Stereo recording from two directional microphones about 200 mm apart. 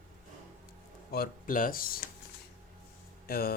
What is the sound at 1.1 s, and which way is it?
Speech, 45° left (ahead or behind).